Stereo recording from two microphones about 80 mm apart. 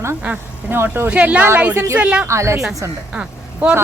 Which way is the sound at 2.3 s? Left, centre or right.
Right.